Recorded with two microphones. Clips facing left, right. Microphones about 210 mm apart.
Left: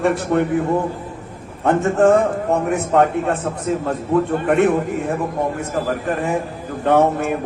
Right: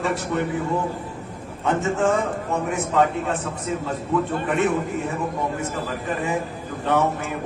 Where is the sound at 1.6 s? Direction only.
55° left (ahead or behind).